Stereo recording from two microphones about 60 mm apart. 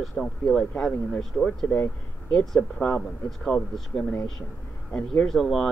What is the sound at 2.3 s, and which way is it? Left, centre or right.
Speech, left.